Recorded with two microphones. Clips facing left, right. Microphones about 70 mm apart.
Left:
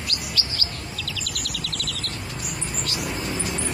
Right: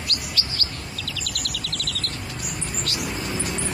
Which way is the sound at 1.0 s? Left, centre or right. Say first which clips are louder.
Even; right.